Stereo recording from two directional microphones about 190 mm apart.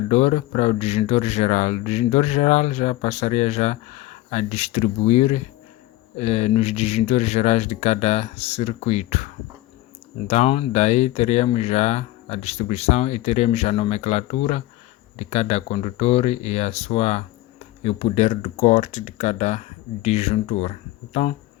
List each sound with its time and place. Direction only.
0.1 s speech: 35° left (ahead or behind)
10.2 s speech: 35° left (ahead or behind)